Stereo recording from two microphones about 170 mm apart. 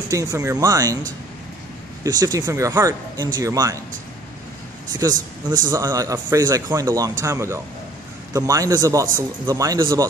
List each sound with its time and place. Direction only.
0.1 s speech: 20° right (ahead or behind)
2.0 s speech: 20° right (ahead or behind)
5.7 s speech: 20° right (ahead or behind)